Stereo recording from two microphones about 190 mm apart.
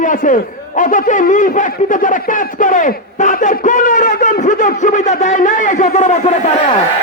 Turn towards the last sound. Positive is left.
turn(degrees=35)  # may be behind; listen again after turning